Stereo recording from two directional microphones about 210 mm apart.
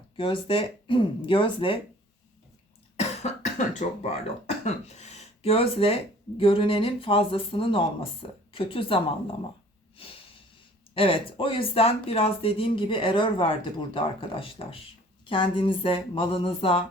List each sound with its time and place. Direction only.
0.2 s speech: 25° left (ahead or behind)
3.0 s speech: 30° left (ahead or behind)
10.9 s speech: 25° left (ahead or behind)